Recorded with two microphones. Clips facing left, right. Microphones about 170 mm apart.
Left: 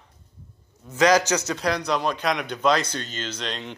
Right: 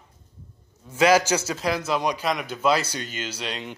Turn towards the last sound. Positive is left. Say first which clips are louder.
# even
turn(degrees=-10)  # may be behind; listen again after turning